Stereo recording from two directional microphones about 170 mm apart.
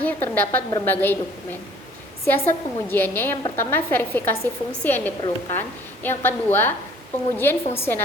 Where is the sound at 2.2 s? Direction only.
10° left (ahead or behind).